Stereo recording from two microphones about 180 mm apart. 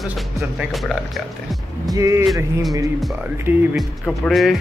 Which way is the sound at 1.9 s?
15° right (ahead or behind).